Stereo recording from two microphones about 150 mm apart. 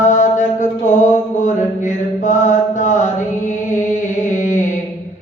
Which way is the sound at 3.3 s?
55° left (ahead or behind).